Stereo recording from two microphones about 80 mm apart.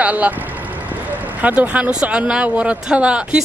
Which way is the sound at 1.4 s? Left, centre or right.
Centre.